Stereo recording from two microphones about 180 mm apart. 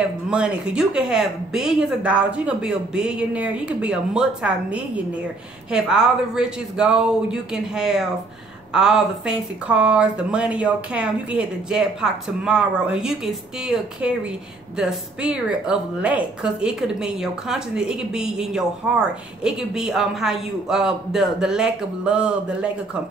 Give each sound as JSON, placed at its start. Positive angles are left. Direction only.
{"t": 0.3, "sound": "a woman's voice", "side_deg": -5}